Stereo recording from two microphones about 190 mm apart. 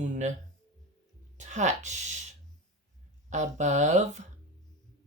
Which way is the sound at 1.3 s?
40° right (ahead or behind).